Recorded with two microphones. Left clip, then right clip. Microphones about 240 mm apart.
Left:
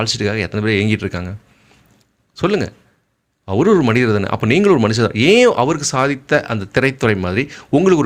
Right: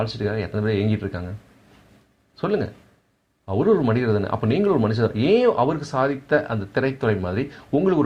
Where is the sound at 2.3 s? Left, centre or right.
Left.